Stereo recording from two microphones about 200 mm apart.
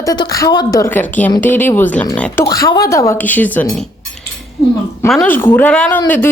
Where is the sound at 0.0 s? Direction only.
15° left (ahead or behind).